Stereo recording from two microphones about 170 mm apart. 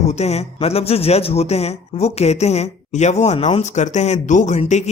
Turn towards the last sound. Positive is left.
turn(degrees=45)  # may be behind; listen again after turning